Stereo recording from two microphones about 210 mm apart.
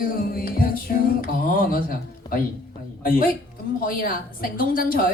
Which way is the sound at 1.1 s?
40° left (ahead or behind).